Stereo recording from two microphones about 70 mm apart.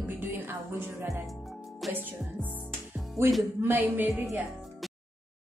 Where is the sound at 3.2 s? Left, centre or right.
Right.